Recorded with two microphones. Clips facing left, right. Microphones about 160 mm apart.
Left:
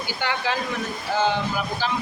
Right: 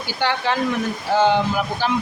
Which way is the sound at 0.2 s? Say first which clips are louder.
Right 5 dB; 70° right (ahead or behind).